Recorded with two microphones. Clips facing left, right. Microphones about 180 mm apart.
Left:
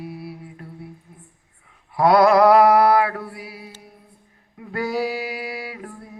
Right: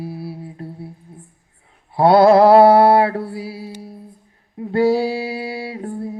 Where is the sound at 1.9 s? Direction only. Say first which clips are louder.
Right 4 dB; 30° right (ahead or behind).